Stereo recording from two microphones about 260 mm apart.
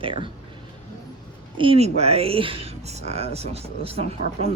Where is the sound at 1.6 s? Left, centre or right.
Right.